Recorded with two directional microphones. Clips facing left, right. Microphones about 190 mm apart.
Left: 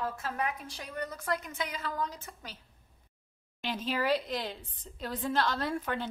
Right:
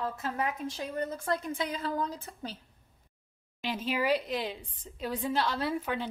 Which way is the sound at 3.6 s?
10° right (ahead or behind).